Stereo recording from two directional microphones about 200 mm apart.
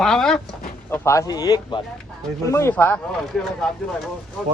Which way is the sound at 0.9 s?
15° left (ahead or behind).